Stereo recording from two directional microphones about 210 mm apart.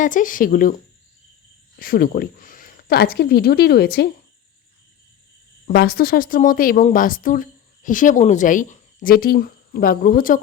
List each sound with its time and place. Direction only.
0.0 s speech: 40° left (ahead or behind)
1.8 s a woman's voice: 45° left (ahead or behind)
5.6 s speech: 45° left (ahead or behind)